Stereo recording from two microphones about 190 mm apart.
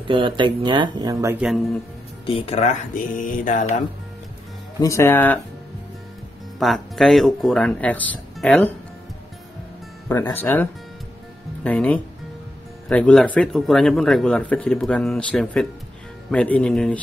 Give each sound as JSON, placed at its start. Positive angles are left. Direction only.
{"t": 0.0, "sound": "speech", "side_deg": -25}
{"t": 1.3, "sound": "speech", "side_deg": 0}
{"t": 2.2, "sound": "speech", "side_deg": 30}
{"t": 3.2, "sound": "music", "side_deg": 45}
{"t": 4.7, "sound": "speech", "side_deg": 15}
{"t": 6.6, "sound": "speech", "side_deg": 0}
{"t": 10.0, "sound": "speech", "side_deg": 15}